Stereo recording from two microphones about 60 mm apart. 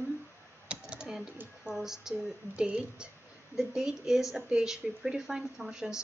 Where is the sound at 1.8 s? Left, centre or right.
Centre.